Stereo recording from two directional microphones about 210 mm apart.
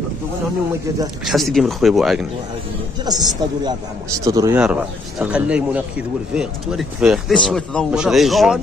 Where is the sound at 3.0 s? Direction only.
20° right (ahead or behind).